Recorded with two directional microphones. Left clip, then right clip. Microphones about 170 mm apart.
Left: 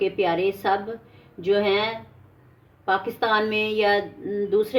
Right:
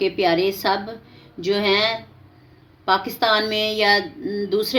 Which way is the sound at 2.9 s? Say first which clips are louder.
Right 4 dB; 35° right (ahead or behind).